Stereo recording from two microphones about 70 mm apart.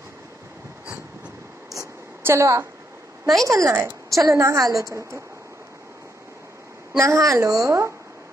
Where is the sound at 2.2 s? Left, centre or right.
Right.